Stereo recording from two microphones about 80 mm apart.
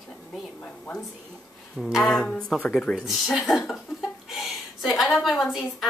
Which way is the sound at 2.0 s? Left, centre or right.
Centre.